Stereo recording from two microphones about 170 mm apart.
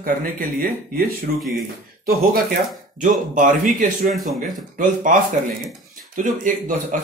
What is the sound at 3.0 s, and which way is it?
Speech, 50° right (ahead or behind).